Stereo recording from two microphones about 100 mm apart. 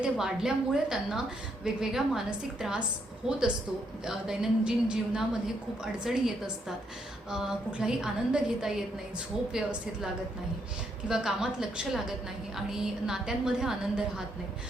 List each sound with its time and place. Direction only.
0.0 s a woman's voice: 5° right (ahead or behind)
4.0 s a woman's voice: 5° right (ahead or behind)
11.1 s a woman's voice: 5° right (ahead or behind)